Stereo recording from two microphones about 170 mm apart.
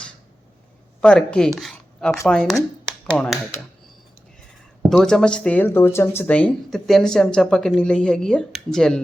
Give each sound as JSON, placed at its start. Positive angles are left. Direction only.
{"t": 1.0, "sound": "speech", "side_deg": 5}
{"t": 4.9, "sound": "speech", "side_deg": 5}